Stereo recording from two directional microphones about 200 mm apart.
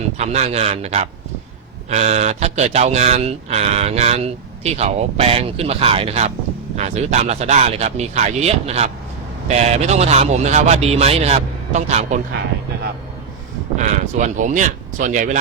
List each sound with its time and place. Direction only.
0.2 s speech: 30° right (ahead or behind)
13.7 s speech: 35° right (ahead or behind)